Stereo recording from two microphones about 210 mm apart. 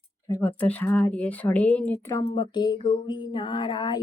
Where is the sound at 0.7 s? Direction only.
10° left (ahead or behind).